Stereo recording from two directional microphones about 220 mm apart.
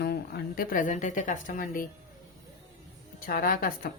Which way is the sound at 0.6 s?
40° left (ahead or behind).